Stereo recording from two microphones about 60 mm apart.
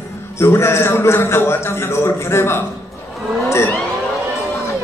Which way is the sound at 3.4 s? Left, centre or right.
Left.